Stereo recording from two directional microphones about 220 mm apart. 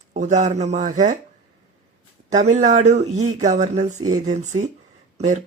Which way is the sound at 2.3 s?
30° right (ahead or behind).